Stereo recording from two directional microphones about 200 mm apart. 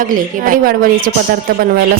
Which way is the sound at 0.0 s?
45° right (ahead or behind).